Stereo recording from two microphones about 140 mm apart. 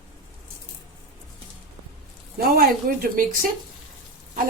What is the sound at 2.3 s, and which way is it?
A woman's voice, 90° right.